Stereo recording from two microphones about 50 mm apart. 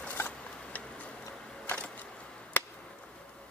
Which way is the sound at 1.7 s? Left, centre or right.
Left.